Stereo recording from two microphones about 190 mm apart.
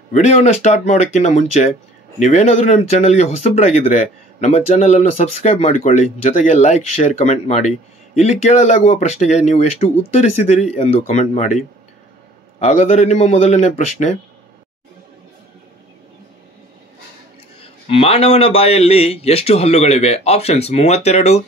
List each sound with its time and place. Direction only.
0.1 s speech: 40° left (ahead or behind)
17.6 s speech: 30° left (ahead or behind)